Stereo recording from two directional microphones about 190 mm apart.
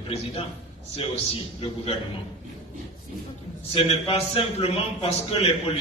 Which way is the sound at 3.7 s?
30° left (ahead or behind).